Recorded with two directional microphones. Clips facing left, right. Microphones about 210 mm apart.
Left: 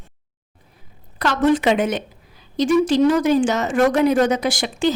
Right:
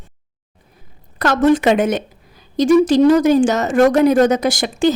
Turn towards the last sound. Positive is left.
turn(degrees=-45)  # may be behind; listen again after turning